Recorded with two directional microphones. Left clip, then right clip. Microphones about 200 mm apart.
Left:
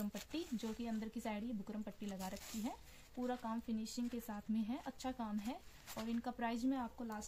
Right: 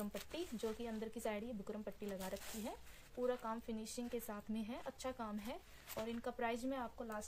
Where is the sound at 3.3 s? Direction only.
45° right (ahead or behind).